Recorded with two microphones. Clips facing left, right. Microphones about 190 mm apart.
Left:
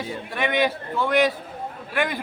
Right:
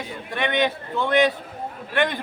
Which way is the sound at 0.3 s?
5° left (ahead or behind).